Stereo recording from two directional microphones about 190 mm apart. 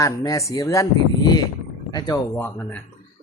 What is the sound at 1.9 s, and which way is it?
Speech, 15° left (ahead or behind).